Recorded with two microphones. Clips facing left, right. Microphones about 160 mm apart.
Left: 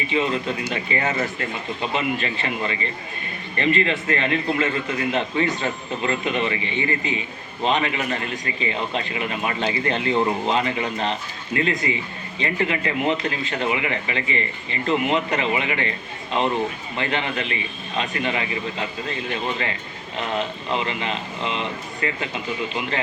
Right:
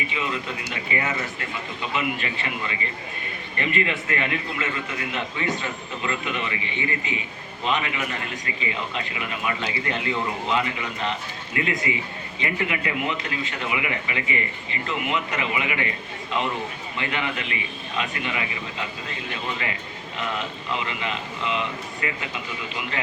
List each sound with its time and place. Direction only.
0.1 s a man's voice: 30° left (ahead or behind)
17.0 s a man's voice: 30° left (ahead or behind)